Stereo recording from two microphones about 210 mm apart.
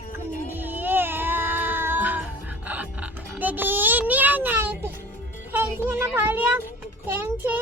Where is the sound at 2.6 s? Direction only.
10° right (ahead or behind).